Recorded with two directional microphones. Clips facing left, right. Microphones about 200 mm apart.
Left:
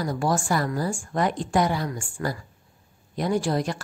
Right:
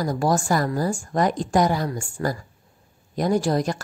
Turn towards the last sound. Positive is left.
turn(degrees=-40)  # may be behind; listen again after turning